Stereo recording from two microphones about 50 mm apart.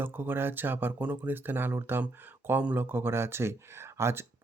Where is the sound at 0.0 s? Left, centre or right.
Right.